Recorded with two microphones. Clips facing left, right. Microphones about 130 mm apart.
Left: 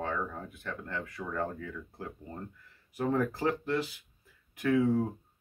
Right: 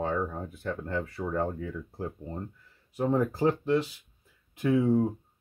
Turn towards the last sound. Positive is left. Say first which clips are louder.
# right 3 dB
turn(degrees=-20)  # may be behind; listen again after turning